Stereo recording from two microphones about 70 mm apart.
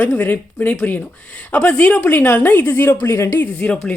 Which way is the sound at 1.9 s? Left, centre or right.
Left.